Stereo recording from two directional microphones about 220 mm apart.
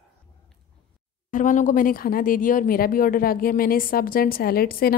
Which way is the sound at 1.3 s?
35° left (ahead or behind).